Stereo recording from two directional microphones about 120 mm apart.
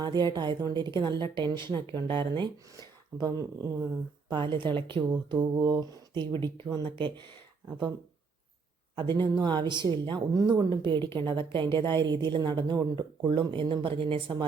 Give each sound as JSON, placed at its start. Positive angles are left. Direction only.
{"t": 0.0, "sound": "speech", "side_deg": -35}
{"t": 2.7, "sound": "speech", "side_deg": -30}
{"t": 4.3, "sound": "a woman's voice", "side_deg": -40}
{"t": 9.0, "sound": "a woman's voice", "side_deg": -40}